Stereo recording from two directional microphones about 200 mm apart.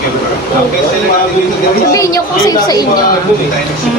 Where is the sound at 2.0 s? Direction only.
15° left (ahead or behind).